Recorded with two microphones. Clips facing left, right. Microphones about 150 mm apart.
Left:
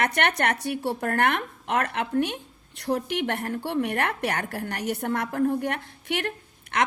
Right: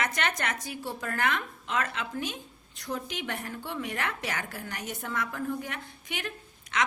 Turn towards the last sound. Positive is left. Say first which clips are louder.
# left 4 dB
turn(degrees=65)  # may be behind; listen again after turning